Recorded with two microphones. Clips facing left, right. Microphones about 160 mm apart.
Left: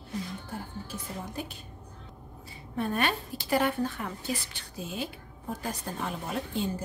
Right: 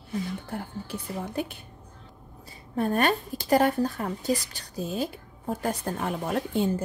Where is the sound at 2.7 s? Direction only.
40° right (ahead or behind).